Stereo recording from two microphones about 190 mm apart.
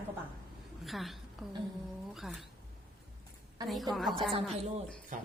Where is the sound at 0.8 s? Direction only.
Centre (ahead or behind).